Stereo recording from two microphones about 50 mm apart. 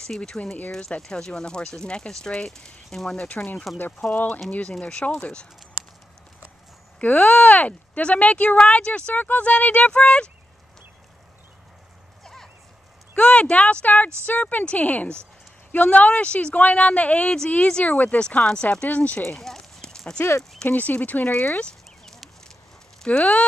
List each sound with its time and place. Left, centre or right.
0.3 s speech: left
0.7 s speech: centre
4.1 s speech: left
7.0 s speech: left
9.1 s speech: left
12.2 s clip-clop: centre
13.1 s speech: left
19.3 s clip-clop: centre
20.2 s speech: left
20.6 s speech: left
22.0 s a sound: centre
23.0 s speech: left